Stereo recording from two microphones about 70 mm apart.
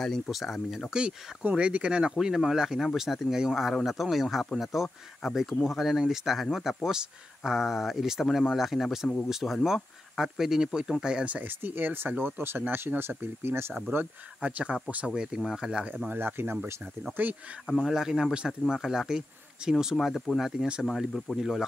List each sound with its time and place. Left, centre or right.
0.0 s speech: centre
11.2 s speech: right
13.9 s speech: right
15.1 s speech: centre
16.1 s speech: right
17.8 s speech: centre